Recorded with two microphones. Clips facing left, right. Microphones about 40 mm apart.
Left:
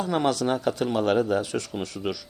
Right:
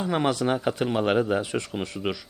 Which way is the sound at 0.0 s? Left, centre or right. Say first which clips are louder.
Even; centre.